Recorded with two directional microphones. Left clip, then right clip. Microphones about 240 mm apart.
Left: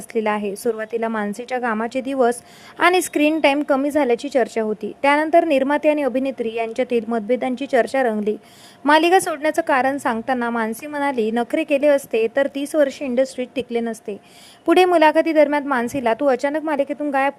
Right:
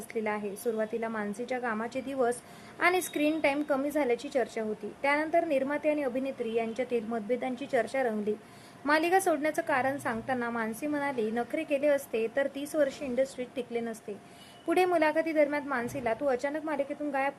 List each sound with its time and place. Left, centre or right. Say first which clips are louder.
0.1 s a woman's voice: left 12 dB; left